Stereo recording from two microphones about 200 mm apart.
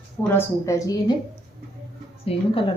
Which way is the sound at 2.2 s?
30° left (ahead or behind).